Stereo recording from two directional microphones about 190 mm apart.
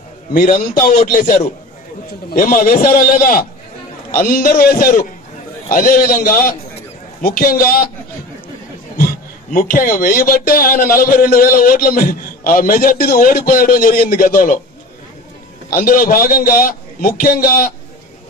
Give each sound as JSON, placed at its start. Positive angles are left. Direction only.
{"t": 0.3, "sound": "speech", "side_deg": 45}
{"t": 8.9, "sound": "speech", "side_deg": 50}
{"t": 15.7, "sound": "speech", "side_deg": 50}